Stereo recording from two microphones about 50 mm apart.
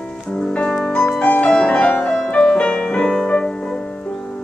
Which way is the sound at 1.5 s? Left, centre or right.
Centre.